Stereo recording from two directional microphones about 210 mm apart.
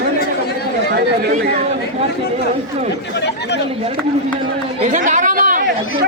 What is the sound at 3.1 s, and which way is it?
Speech, 55° left (ahead or behind).